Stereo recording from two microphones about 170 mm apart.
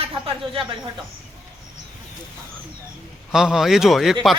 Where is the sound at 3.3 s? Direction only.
5° right (ahead or behind).